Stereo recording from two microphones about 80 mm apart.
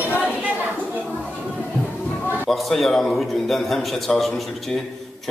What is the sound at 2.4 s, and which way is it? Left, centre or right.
A man's voice, centre.